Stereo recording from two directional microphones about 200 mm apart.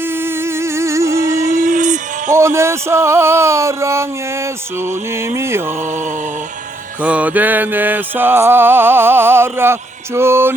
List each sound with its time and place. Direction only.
0.0 s a sound: 10° right (ahead or behind)
1.4 s music: 40° right (ahead or behind)
2.3 s speech: 15° right (ahead or behind)
7.0 s speech: 5° right (ahead or behind)